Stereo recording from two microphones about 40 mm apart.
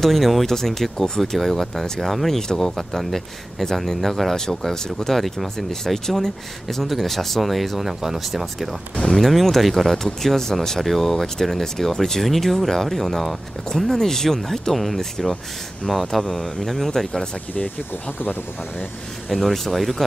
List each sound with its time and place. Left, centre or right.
0.0 s speech: centre
10.0 s speech: centre
16.2 s speech: centre
19.3 s speech: centre